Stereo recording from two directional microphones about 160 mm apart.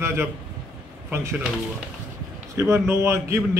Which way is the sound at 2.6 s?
15° right (ahead or behind).